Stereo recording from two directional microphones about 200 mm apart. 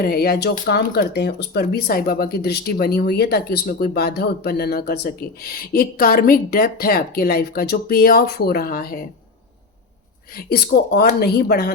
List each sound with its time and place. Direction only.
0.0 s speech: 50° left (ahead or behind)
10.3 s speech: 50° left (ahead or behind)